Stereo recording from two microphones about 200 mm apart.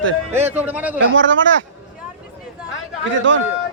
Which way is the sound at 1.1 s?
70° right (ahead or behind).